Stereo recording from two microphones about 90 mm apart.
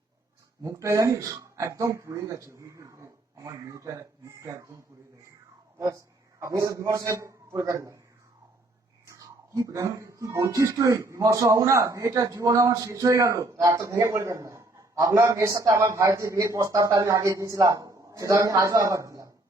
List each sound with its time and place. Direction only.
0.6 s a man's voice: 30° right (ahead or behind)
6.4 s a man's voice: 40° right (ahead or behind)
9.0 s a man's voice: 35° right (ahead or behind)